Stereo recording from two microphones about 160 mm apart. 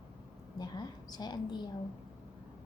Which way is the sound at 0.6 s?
25° left (ahead or behind).